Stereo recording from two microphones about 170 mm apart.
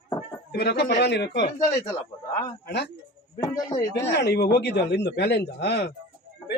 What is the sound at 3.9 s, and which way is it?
A man's voice, 85° left.